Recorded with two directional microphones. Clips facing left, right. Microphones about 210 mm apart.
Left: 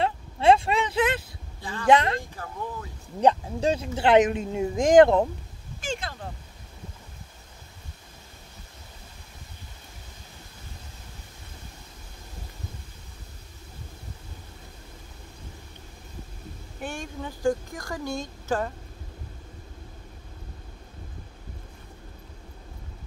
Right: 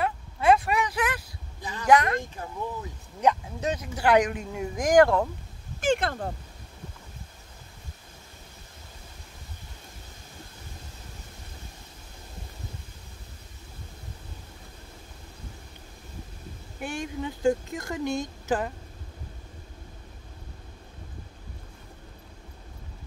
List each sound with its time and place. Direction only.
0.0 s a sound: 25° left (ahead or behind)
1.6 s speech: 20° right (ahead or behind)
1.9 s speech: 25° left (ahead or behind)
3.2 s speech: 30° left (ahead or behind)
5.8 s speech: 60° right (ahead or behind)
16.8 s speech: 20° right (ahead or behind)